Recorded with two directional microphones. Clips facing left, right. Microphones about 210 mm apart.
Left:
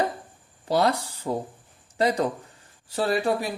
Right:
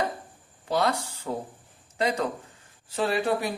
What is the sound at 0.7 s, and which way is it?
Speech, 35° left (ahead or behind).